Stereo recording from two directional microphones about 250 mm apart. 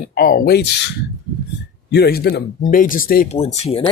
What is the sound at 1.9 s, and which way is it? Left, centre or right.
Speech, left.